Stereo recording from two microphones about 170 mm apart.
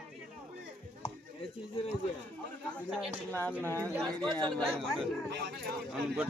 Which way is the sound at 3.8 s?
15° right (ahead or behind).